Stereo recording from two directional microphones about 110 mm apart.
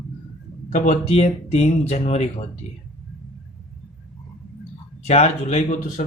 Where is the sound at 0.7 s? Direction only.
80° left.